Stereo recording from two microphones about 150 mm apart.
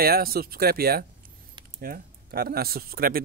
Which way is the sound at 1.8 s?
75° right (ahead or behind).